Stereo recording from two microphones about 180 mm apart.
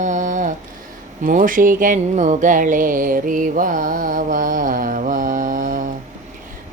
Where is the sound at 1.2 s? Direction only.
50° right (ahead or behind).